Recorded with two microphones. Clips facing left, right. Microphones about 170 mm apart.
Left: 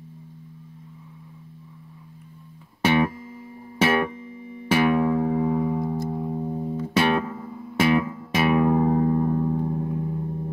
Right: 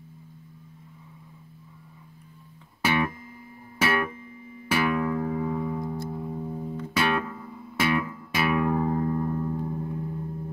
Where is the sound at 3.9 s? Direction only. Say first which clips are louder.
Left 4 dB; 30° left (ahead or behind).